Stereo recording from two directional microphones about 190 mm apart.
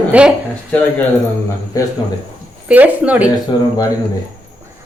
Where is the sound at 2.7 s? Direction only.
10° right (ahead or behind).